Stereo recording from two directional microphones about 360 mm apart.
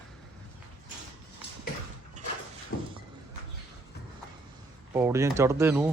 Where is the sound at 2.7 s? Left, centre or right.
Left.